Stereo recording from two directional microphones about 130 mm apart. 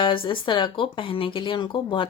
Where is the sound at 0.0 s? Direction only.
40° left (ahead or behind).